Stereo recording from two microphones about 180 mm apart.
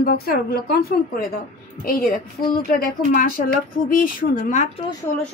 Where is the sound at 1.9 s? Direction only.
55° left (ahead or behind).